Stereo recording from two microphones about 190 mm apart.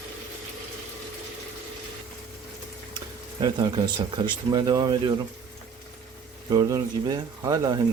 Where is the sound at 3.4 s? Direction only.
20° right (ahead or behind).